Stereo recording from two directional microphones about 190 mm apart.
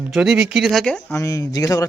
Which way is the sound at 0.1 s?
Centre (ahead or behind).